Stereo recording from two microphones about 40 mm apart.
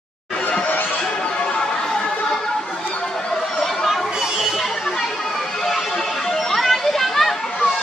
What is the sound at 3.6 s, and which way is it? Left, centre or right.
Chatter, centre.